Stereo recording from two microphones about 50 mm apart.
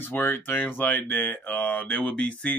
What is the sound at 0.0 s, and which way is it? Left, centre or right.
Speech, left.